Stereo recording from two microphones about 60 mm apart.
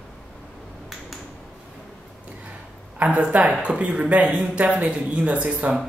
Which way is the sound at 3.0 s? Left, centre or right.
Right.